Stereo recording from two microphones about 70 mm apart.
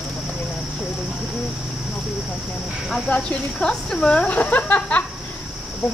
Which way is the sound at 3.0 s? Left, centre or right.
Centre.